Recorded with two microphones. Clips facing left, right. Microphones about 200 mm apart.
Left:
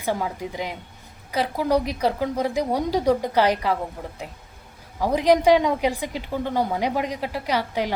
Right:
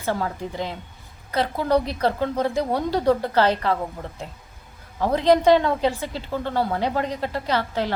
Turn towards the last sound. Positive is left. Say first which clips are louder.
# even
turn(degrees=10)  # may be behind; listen again after turning